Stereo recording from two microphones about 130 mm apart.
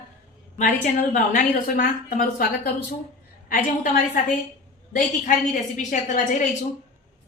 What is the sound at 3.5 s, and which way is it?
Speech, 90° left.